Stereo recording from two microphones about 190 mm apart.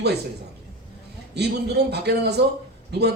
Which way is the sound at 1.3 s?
60° right (ahead or behind).